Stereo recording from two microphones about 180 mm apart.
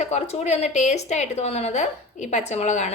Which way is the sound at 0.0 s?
40° left (ahead or behind).